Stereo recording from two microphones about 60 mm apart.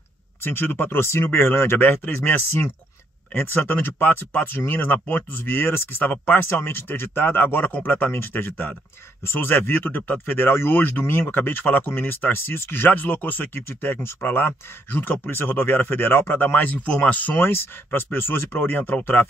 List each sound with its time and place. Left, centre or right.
0.4 s speech: left
17.4 s speech: left